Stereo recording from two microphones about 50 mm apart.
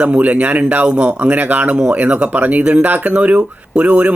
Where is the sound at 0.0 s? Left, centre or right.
Right.